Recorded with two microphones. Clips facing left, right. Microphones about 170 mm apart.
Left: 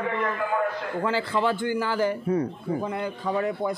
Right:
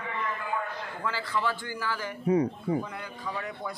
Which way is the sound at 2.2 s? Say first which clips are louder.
Right 1 dB; 15° right (ahead or behind).